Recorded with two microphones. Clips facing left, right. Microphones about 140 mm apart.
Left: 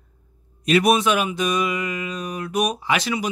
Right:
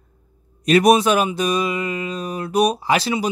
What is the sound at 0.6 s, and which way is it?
Speech, 40° right (ahead or behind).